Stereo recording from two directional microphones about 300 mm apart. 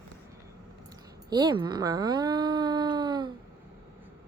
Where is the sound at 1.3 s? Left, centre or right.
Centre.